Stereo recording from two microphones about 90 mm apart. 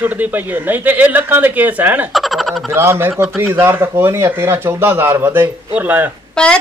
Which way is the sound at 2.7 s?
25° right (ahead or behind).